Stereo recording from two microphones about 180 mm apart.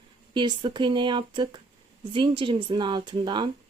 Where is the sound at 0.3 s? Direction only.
25° right (ahead or behind).